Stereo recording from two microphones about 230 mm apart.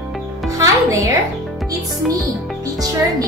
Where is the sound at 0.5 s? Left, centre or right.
Centre.